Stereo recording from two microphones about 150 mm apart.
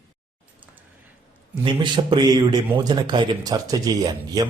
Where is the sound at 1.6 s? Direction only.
30° right (ahead or behind).